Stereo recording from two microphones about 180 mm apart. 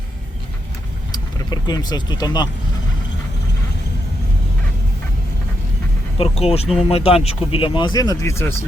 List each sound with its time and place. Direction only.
1.1 s speech: 20° left (ahead or behind)
6.1 s speech: 35° left (ahead or behind); by 8.5 s 15° left (ahead or behind)